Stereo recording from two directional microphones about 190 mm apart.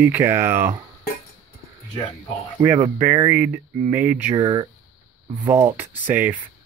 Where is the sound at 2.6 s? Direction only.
15° right (ahead or behind).